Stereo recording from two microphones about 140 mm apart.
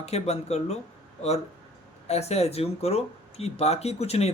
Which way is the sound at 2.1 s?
50° left (ahead or behind).